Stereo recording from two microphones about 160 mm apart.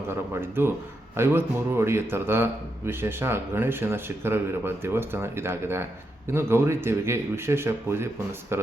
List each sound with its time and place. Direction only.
0.3 s speech: 15° right (ahead or behind)